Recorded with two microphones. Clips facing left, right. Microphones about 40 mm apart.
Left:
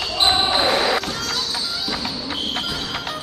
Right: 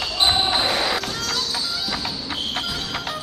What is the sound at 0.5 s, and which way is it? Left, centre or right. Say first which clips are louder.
Basketball bounce: left 3 dB; centre.